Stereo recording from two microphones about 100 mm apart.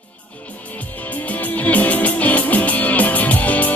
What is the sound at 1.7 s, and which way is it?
Music, 15° left (ahead or behind).